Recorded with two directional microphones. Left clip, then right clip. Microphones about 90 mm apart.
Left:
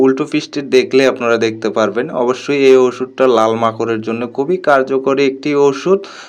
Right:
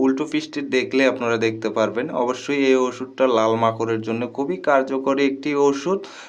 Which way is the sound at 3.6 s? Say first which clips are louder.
Left 5 dB; 40° left (ahead or behind).